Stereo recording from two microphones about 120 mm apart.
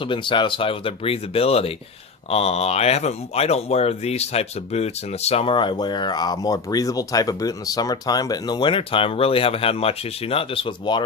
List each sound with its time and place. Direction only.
0.0 s speech: 45° left (ahead or behind)